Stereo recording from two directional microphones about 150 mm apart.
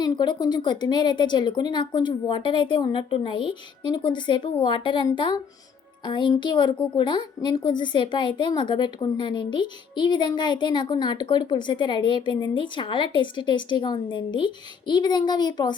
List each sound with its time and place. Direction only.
0.0 s a woman's voice: 30° left (ahead or behind)